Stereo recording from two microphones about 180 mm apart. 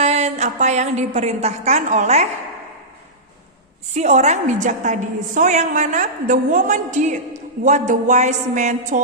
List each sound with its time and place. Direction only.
0.0 s a woman's voice: 35° right (ahead or behind)
3.9 s a woman's voice: 40° right (ahead or behind)